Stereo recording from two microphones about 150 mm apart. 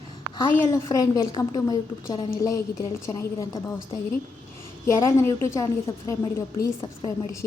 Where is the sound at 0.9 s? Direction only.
25° left (ahead or behind).